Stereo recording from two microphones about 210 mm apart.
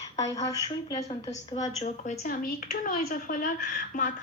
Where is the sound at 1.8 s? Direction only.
35° left (ahead or behind).